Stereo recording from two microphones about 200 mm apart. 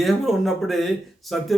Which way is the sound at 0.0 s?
Centre (ahead or behind).